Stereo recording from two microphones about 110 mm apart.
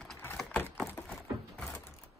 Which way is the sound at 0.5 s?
20° left (ahead or behind).